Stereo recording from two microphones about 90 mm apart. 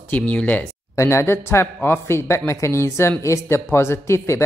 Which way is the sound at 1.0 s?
30° left (ahead or behind).